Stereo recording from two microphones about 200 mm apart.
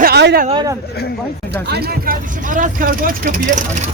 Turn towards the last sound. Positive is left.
turn(degrees=-45)  # may be behind; listen again after turning